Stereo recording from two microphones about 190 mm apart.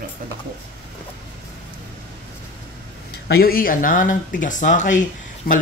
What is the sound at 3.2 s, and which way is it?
Speech, 55° left (ahead or behind).